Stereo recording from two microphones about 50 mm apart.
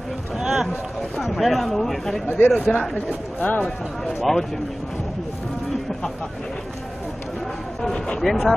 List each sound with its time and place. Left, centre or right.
0.4 s run: centre
1.1 s speech: centre
2.2 s speech: left
3.6 s speech: centre
8.2 s speech: centre